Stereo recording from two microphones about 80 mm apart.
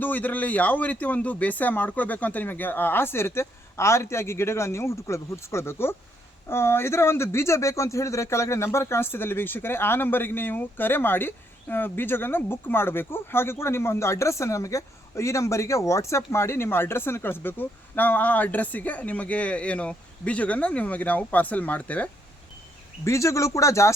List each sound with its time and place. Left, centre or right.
0.0 s speech: left
23.0 s speech: left